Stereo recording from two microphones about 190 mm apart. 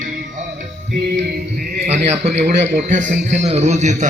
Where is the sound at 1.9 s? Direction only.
35° right (ahead or behind).